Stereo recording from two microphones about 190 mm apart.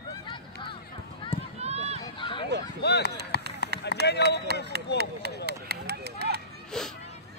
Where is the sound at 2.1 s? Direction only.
25° left (ahead or behind).